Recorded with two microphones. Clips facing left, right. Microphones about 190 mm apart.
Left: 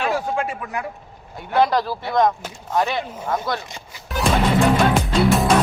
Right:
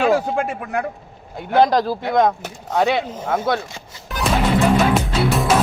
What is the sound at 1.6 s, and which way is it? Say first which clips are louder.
Speech: right 3 dB; 45° right (ahead or behind).